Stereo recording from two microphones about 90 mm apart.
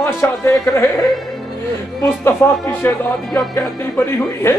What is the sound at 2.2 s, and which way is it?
Speech, 25° left (ahead or behind).